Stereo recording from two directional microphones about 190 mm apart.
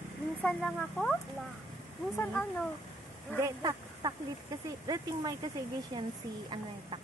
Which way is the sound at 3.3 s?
20° right (ahead or behind).